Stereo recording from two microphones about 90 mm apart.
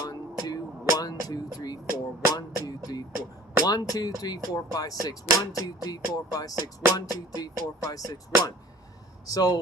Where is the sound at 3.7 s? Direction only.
45° left (ahead or behind).